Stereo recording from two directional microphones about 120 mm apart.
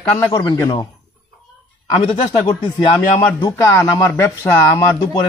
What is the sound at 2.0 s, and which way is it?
Speech, 45° left (ahead or behind).